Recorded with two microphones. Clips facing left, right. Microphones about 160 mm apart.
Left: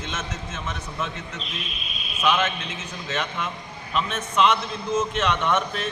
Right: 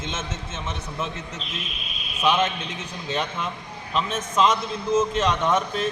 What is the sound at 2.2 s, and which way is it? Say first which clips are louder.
Speech: right 1 dB; 30° right (ahead or behind).